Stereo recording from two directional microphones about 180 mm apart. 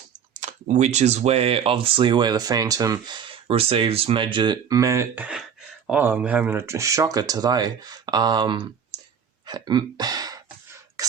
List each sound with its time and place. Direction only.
0.3 s speech: 40° right (ahead or behind); by 10.4 s 20° right (ahead or behind)